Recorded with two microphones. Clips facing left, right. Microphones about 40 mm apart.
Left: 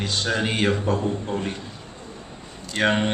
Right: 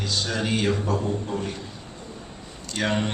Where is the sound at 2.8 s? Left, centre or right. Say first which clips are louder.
Left 4 dB; left.